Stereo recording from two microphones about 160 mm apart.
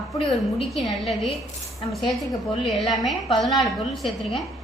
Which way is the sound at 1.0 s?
Centre (ahead or behind).